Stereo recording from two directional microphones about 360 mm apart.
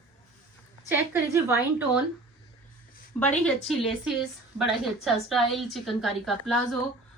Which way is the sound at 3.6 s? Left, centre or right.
Centre.